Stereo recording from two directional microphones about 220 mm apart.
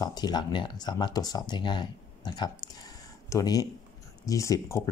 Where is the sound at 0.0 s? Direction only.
20° left (ahead or behind).